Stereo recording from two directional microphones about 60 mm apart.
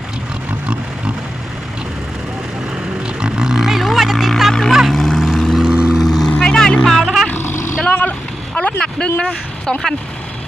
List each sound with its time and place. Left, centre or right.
3.1 s a sound: centre
4.7 s vehicle: centre
5.6 s vehicle: centre
6.0 s vehicle: centre
6.8 s music: centre
7.3 s vehicle: left
7.9 s vehicle: left
9.6 s speech: centre